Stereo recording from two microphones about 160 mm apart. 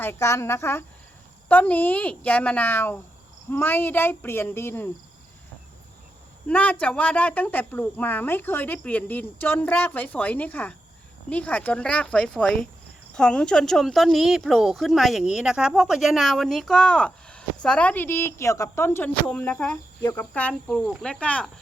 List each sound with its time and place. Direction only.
0.0 s a woman's voice: 15° left (ahead or behind)
6.5 s a woman's voice: 10° left (ahead or behind)